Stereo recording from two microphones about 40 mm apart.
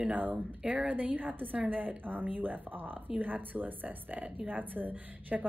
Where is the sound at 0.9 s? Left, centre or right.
Right.